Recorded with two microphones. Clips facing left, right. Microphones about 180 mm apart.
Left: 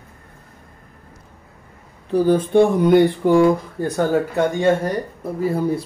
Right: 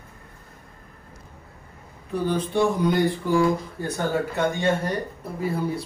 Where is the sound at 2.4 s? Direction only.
55° left (ahead or behind).